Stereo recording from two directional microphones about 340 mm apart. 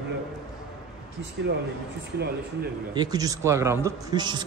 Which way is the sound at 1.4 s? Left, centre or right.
Right.